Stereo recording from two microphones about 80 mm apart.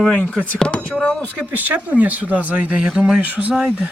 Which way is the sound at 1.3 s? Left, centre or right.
Centre.